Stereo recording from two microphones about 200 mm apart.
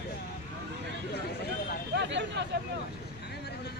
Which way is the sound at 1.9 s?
60° right (ahead or behind).